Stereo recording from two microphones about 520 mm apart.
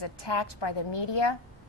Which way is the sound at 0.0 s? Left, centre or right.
Left.